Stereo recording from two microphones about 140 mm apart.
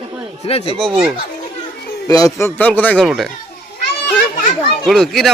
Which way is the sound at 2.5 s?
10° left (ahead or behind).